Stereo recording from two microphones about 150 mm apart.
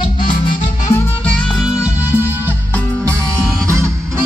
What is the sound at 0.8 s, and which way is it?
Music, 15° left (ahead or behind).